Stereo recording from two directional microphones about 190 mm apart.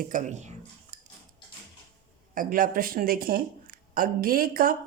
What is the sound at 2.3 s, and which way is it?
Speech, 45° right (ahead or behind).